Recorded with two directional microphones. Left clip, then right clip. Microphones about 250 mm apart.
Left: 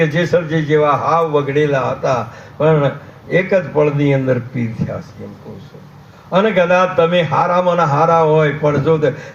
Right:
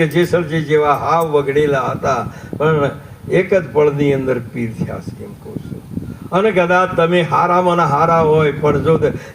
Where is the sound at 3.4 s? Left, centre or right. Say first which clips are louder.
Right 1 dB; right.